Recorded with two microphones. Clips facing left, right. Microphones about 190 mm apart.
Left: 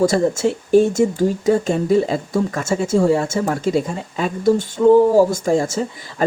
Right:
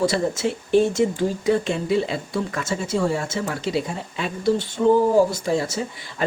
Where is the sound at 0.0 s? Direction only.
45° left (ahead or behind).